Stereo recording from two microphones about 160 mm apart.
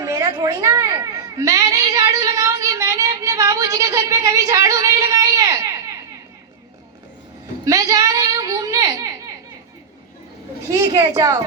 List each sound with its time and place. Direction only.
0.0 s a sound: 20° right (ahead or behind)
7.6 s music: 20° right (ahead or behind)
10.7 s a woman's voice: 20° right (ahead or behind)